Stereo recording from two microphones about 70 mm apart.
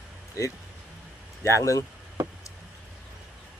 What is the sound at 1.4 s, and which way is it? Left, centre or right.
Speech, left.